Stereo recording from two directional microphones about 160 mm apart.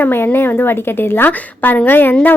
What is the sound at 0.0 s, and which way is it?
A woman's voice, 10° left (ahead or behind).